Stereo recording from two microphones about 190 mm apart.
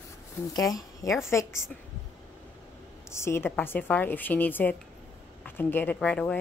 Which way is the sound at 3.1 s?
15° left (ahead or behind).